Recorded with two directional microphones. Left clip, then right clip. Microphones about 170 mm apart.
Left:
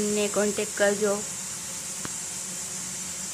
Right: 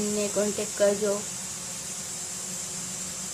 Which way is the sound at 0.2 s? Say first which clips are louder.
Even; centre (ahead or behind).